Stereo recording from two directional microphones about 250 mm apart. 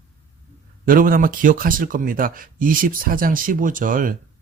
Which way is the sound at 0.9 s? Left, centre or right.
Right.